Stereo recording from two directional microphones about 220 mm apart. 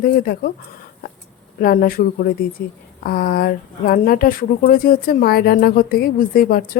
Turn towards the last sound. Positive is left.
turn(degrees=40)  # may be behind; listen again after turning